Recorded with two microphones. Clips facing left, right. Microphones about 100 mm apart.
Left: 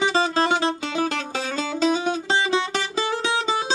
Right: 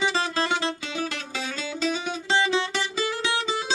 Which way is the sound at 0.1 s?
55° left (ahead or behind).